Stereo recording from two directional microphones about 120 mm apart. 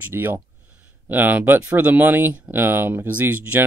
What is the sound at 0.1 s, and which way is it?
Speech, 20° right (ahead or behind).